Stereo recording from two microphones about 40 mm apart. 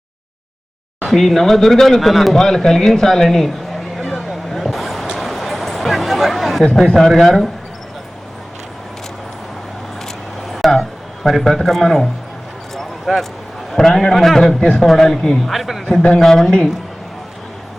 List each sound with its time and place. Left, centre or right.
1.0 s speech: centre
3.9 s a sound: centre
6.7 s speech: centre
10.5 s a sound: centre
13.1 s speech: centre
13.7 s speech: centre
15.5 s speech: centre
16.2 s speech: centre